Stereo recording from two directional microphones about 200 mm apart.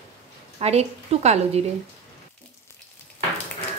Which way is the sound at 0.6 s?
30° right (ahead or behind).